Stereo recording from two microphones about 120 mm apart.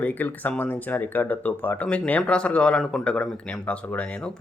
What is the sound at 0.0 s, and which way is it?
Speech, 15° left (ahead or behind).